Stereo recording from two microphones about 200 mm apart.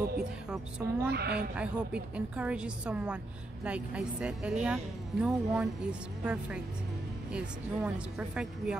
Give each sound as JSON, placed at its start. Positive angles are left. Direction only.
{"t": 0.2, "sound": "music", "side_deg": -5}
{"t": 1.1, "sound": "a woman's voice", "side_deg": -55}
{"t": 1.6, "sound": "a woman's voice", "side_deg": -5}